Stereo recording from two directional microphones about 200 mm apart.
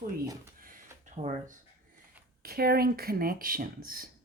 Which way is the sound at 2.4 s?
50° right (ahead or behind).